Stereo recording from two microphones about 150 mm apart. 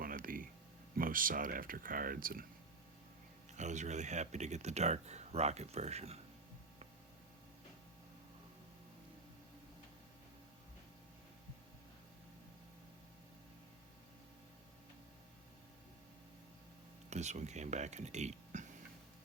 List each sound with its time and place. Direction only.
0.0 s a sound: 70° right (ahead or behind)
0.9 s speech: 70° right (ahead or behind)
3.5 s speech: 50° right (ahead or behind)
17.1 s speech: 50° right (ahead or behind)